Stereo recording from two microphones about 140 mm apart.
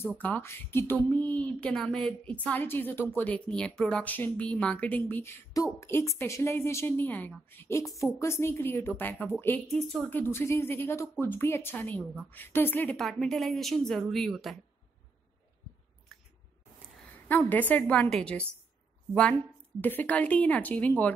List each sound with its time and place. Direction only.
0.2 s speech: 15° left (ahead or behind)
16.1 s a sound: centre (ahead or behind)
17.0 s a woman's voice: 15° left (ahead or behind)
19.8 s speech: 10° left (ahead or behind)